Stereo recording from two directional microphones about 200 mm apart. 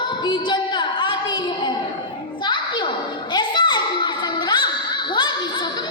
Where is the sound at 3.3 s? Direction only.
20° left (ahead or behind).